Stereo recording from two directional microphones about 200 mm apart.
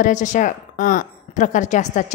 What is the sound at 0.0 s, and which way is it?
A woman's voice, 40° left (ahead or behind).